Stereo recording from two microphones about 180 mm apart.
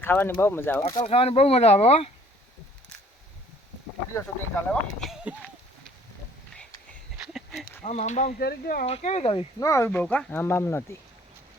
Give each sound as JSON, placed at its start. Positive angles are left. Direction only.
{"t": 0.0, "sound": "speech", "side_deg": 10}
{"t": 1.0, "sound": "speech", "side_deg": 35}
{"t": 4.1, "sound": "speech", "side_deg": 10}
{"t": 7.2, "sound": "a sound", "side_deg": 0}
{"t": 7.9, "sound": "speech", "side_deg": 40}
{"t": 8.4, "sound": "speech", "side_deg": 55}
{"t": 8.9, "sound": "speech", "side_deg": 35}
{"t": 9.6, "sound": "speech", "side_deg": 15}